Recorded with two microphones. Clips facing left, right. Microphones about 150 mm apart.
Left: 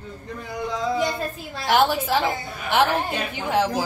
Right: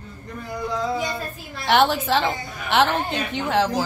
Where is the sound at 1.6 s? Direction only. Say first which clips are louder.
Right 1 dB; 5° left (ahead or behind).